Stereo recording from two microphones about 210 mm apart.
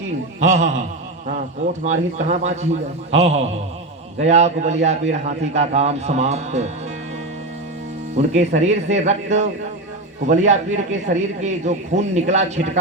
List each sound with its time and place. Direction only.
0.3 s a man's voice: 35° right (ahead or behind)
2.1 s a man's voice: 35° right (ahead or behind)
8.1 s a man's voice: 30° right (ahead or behind)